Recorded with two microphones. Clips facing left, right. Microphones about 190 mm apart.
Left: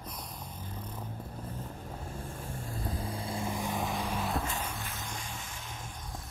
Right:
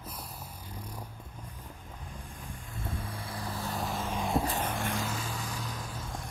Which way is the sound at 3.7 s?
Centre (ahead or behind).